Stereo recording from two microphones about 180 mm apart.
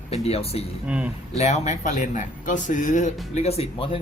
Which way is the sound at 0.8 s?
5° right (ahead or behind).